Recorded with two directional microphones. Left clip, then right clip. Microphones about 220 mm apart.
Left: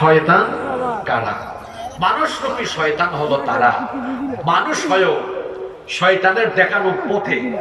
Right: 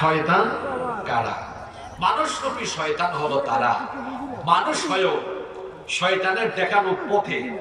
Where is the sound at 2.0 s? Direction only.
25° left (ahead or behind).